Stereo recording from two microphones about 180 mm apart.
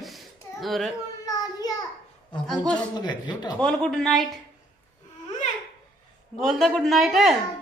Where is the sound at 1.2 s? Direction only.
20° left (ahead or behind).